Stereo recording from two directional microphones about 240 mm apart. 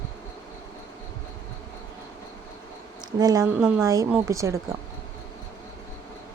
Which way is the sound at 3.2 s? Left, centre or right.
Centre.